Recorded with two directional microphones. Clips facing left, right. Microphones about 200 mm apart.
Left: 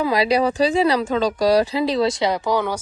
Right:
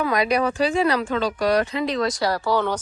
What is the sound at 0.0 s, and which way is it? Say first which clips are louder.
Speech: left 3 dB; 30° left (ahead or behind).